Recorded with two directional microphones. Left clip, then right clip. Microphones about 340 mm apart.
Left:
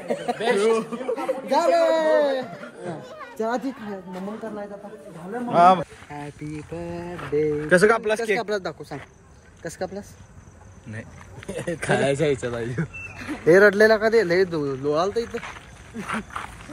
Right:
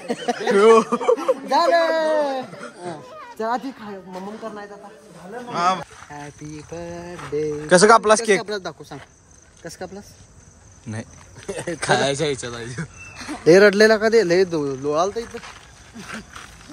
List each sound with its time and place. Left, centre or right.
0.1 s speech: right
3.2 s children playing: centre
5.5 s speech: centre
6.0 s speech: centre
13.3 s speech: right